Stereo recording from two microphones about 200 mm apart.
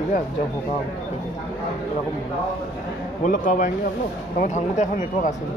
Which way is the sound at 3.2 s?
40° left (ahead or behind).